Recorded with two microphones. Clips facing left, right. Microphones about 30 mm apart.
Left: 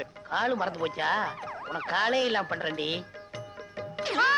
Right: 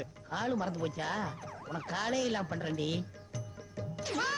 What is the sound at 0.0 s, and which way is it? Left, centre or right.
A man's voice, left.